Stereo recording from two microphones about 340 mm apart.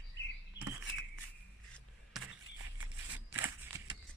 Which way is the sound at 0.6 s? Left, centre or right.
Left.